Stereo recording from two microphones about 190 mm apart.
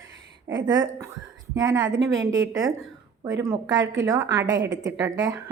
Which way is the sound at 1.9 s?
90° right.